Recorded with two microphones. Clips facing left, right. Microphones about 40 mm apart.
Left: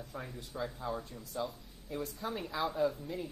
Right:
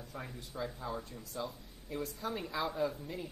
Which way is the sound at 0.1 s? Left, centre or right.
Centre.